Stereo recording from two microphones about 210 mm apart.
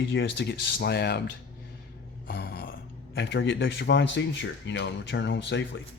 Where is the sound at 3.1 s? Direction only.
55° left (ahead or behind).